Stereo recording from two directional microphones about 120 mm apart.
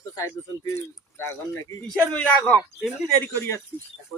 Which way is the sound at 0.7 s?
20° left (ahead or behind).